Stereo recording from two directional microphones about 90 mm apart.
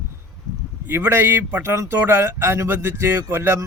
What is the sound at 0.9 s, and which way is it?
Speech, 25° right (ahead or behind).